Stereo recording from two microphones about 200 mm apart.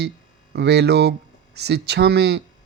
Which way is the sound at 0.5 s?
55° right (ahead or behind).